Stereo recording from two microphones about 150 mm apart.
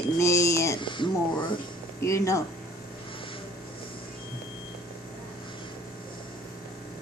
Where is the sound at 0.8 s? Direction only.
30° left (ahead or behind).